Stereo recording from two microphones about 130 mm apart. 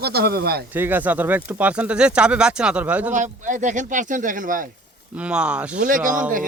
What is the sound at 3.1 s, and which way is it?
Speech, 75° right (ahead or behind).